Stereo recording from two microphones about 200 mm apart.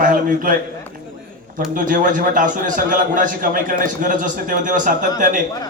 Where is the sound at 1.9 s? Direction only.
40° right (ahead or behind).